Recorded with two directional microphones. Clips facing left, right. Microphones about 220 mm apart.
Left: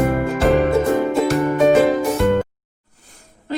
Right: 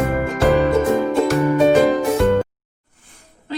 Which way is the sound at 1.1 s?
Centre (ahead or behind).